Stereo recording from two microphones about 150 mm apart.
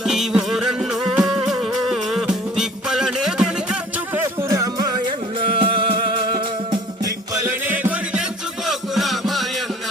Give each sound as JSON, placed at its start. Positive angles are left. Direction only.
{"t": 0.0, "sound": "music", "side_deg": 0}
{"t": 4.2, "sound": "music", "side_deg": -20}
{"t": 5.5, "sound": "music", "side_deg": -35}
{"t": 7.7, "sound": "music", "side_deg": -10}